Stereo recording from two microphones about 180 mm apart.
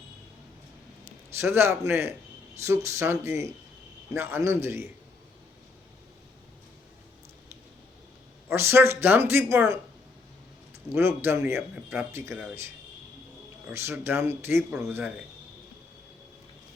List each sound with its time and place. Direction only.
1.4 s a man's voice: 15° right (ahead or behind)
8.4 s a man's voice: 15° right (ahead or behind)
10.9 s a man's voice: 15° right (ahead or behind)
13.7 s a man's voice: 15° right (ahead or behind)